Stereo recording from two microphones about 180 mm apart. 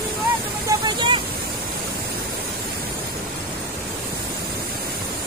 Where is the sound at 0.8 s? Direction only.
25° right (ahead or behind).